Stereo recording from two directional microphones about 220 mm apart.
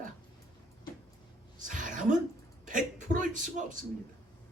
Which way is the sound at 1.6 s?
35° right (ahead or behind).